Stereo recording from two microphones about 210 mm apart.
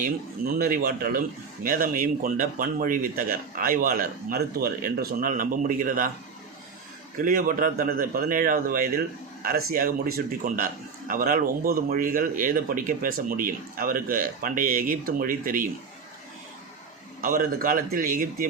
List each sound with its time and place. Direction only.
0.0 s speech: 40° right (ahead or behind)
7.2 s speech: 40° right (ahead or behind)
17.2 s speech: 40° right (ahead or behind)